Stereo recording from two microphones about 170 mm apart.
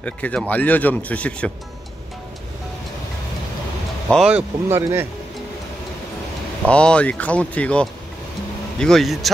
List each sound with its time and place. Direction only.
0.0 s a man's voice: 5° left (ahead or behind)
4.1 s speech: 5° right (ahead or behind)
6.7 s a man's voice: 5° left (ahead or behind)